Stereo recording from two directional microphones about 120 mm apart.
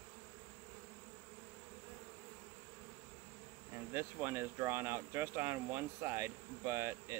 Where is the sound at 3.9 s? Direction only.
20° right (ahead or behind).